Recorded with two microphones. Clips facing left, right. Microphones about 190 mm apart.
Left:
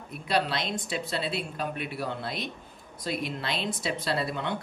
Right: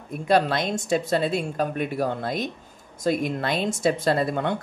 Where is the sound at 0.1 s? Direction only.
50° right (ahead or behind).